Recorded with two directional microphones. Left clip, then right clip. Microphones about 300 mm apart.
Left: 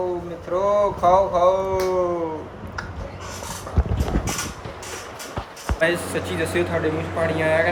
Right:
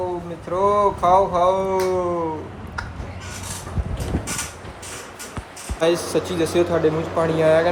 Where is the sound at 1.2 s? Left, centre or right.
Right.